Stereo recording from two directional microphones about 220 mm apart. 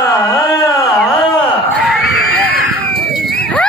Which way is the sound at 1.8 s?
Centre (ahead or behind).